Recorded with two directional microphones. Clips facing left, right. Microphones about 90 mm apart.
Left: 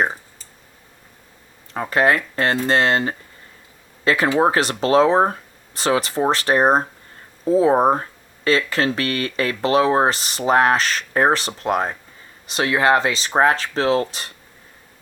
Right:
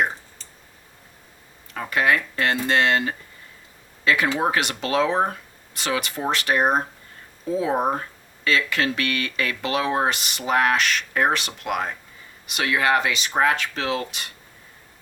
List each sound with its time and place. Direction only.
1.7 s speech: 30° left (ahead or behind)